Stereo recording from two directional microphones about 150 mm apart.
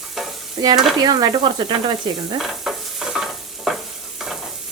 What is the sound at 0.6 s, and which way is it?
Stir, 30° right (ahead or behind).